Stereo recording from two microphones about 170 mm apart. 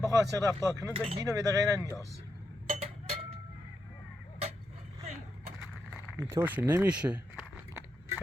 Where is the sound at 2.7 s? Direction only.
35° right (ahead or behind).